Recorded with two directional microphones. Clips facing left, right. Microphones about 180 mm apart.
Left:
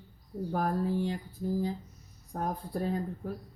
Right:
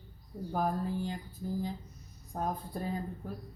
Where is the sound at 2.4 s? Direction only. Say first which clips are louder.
Left 2 dB; 75° left (ahead or behind).